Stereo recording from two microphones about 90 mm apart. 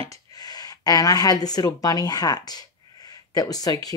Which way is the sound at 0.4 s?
45° left (ahead or behind).